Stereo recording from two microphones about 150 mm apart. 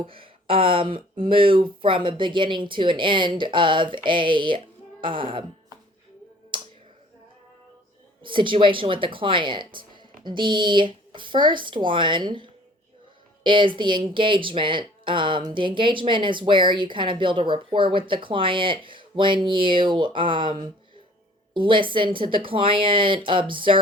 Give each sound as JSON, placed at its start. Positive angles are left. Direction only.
{"t": 0.0, "sound": "speech", "side_deg": -35}
{"t": 6.5, "sound": "finger snapping", "side_deg": -35}
{"t": 8.2, "sound": "speech", "side_deg": -35}